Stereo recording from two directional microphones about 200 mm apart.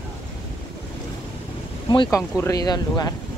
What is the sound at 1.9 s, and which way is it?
A woman's voice, 25° left (ahead or behind).